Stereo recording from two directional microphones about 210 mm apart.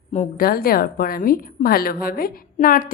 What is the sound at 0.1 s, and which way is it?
A woman's voice, 40° left (ahead or behind).